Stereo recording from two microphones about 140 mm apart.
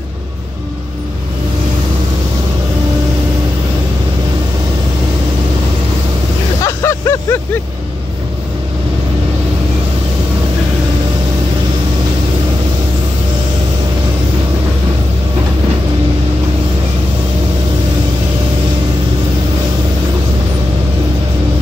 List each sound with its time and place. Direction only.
6.6 s vehicle: 20° left (ahead or behind)